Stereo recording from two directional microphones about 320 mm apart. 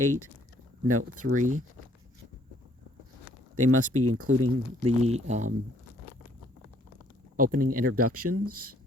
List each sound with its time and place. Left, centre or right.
0.9 s speech: right
1.3 s speech: right
3.5 s speech: right
4.9 s speech: centre
7.3 s speech: right
7.9 s speech: right